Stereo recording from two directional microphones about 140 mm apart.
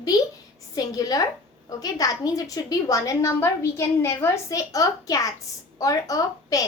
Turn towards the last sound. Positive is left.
turn(degrees=25)  # may be behind; listen again after turning